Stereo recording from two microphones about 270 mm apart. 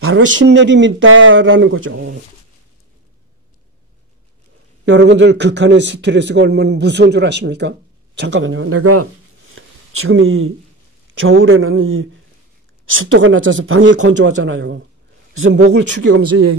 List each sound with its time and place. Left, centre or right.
0.0 s speech: right
4.8 s a man's voice: right
9.6 s a sound: right
11.1 s a man's voice: right
16.1 s speech: right